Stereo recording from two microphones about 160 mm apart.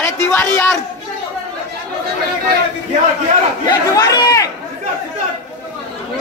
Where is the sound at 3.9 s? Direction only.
25° left (ahead or behind).